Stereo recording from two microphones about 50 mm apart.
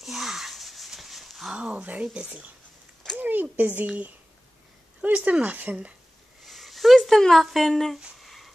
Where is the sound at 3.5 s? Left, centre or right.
Right.